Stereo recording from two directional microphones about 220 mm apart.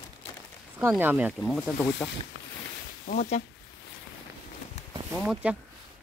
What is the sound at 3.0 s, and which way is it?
Speech, 30° left (ahead or behind).